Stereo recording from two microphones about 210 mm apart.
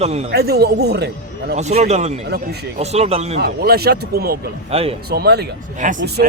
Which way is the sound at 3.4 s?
50° right (ahead or behind).